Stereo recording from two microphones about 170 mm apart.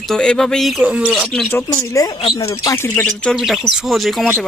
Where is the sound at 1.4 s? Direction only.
15° left (ahead or behind).